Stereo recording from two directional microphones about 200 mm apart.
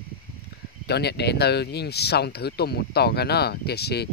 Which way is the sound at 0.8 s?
55° left (ahead or behind).